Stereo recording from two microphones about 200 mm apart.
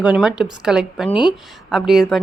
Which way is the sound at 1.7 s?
Centre (ahead or behind).